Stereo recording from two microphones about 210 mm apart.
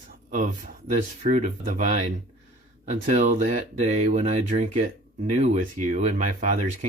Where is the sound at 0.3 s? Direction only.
40° right (ahead or behind).